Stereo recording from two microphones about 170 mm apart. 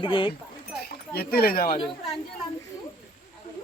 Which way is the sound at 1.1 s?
65° left (ahead or behind).